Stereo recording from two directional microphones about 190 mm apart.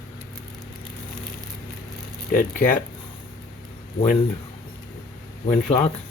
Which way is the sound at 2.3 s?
50° left (ahead or behind).